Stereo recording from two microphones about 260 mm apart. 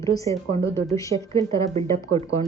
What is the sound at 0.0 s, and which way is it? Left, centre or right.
Speech, centre.